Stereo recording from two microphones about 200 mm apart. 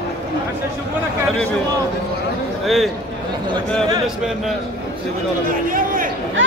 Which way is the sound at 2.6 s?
Centre (ahead or behind).